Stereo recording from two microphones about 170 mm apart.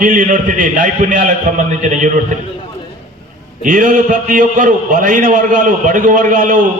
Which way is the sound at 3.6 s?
50° right (ahead or behind).